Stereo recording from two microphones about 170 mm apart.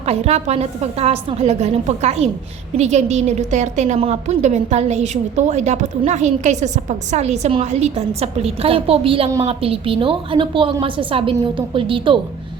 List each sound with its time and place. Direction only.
0.0 s a woman's voice: 40° right (ahead or behind)